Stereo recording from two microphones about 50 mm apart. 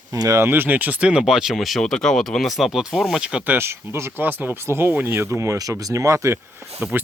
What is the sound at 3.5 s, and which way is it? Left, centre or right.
Speech, right.